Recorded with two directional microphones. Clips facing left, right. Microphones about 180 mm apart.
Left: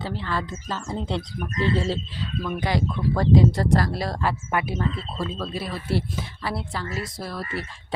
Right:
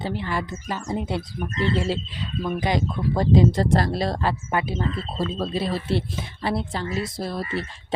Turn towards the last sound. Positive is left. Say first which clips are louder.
# right 4 dB
turn(degrees=-25)  # may be behind; listen again after turning